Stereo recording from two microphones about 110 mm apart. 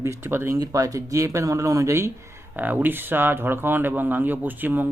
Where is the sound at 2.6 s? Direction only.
15° right (ahead or behind).